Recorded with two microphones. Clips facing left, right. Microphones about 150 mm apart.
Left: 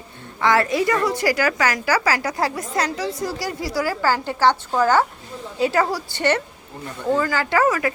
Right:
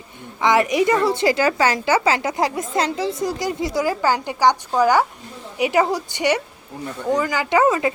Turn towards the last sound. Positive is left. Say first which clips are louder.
# right 2 dB
turn(degrees=-25)  # may be behind; listen again after turning